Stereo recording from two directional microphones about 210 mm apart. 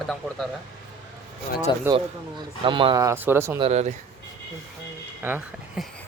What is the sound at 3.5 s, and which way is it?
Speech, 30° right (ahead or behind).